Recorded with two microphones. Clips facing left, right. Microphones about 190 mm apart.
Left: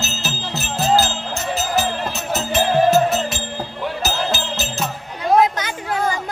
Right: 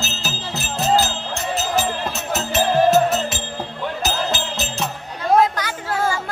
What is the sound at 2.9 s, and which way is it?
Music, centre (ahead or behind).